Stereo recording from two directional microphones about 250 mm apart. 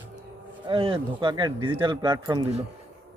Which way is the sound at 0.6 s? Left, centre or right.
Right.